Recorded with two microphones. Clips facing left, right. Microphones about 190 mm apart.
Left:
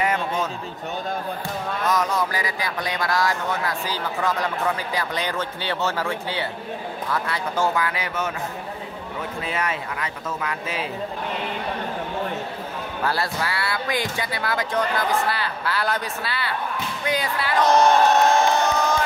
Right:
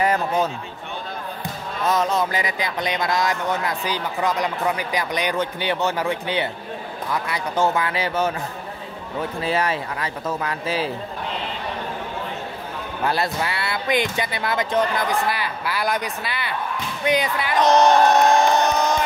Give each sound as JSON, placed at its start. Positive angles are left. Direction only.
{"t": 0.0, "sound": "a sound", "side_deg": -35}
{"t": 1.9, "sound": "speech", "side_deg": -25}
{"t": 9.4, "sound": "speech", "side_deg": -35}
{"t": 13.0, "sound": "speech", "side_deg": -20}